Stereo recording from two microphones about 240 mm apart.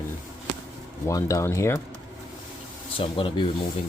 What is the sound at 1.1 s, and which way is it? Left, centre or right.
Speech, centre.